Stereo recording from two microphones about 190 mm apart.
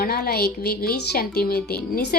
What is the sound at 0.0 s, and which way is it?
A woman's voice, 50° left (ahead or behind).